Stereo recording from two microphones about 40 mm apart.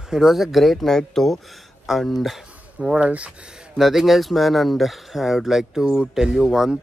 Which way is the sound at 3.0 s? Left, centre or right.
Right.